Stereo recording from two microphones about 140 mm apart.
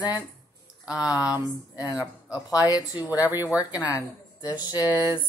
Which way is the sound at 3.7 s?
25° left (ahead or behind).